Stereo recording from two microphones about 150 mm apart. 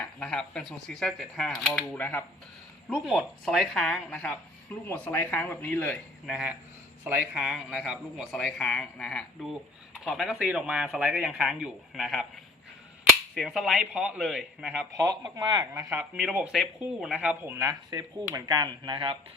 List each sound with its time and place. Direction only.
0.0 s speech: 5° left (ahead or behind)
2.9 s speech: 5° right (ahead or behind); by 6.0 s 10° left (ahead or behind)
6.2 s speech: 5° right (ahead or behind)
13.3 s speech: centre (ahead or behind)
14.9 s speech: 20° right (ahead or behind)
16.1 s speech: centre (ahead or behind); by 19.1 s 30° right (ahead or behind)